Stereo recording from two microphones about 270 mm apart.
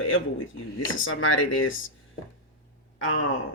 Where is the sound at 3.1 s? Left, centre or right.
Left.